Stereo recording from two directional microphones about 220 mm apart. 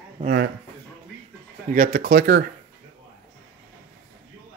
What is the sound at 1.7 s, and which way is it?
Speech, 40° right (ahead or behind).